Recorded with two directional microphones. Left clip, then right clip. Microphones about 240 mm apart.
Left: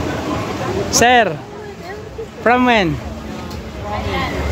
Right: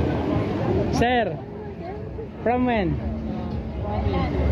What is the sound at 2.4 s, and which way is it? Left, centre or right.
Speech, left.